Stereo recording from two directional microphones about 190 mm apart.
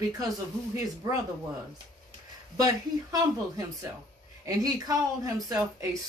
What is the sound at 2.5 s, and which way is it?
Speech, 20° right (ahead or behind).